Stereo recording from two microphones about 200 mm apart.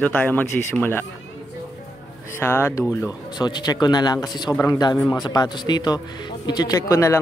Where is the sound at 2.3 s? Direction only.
10° left (ahead or behind).